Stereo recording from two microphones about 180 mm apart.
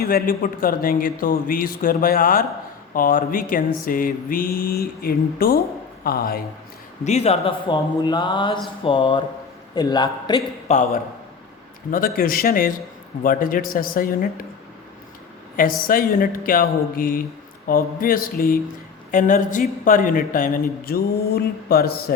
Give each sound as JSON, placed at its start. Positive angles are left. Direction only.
{"t": 0.0, "sound": "speech", "side_deg": 55}
{"t": 7.0, "sound": "speech", "side_deg": 40}
{"t": 10.7, "sound": "speech", "side_deg": 45}
{"t": 15.5, "sound": "speech", "side_deg": 50}